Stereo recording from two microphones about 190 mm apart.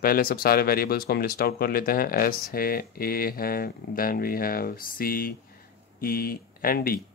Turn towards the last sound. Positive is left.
turn(degrees=50)  # may be behind; listen again after turning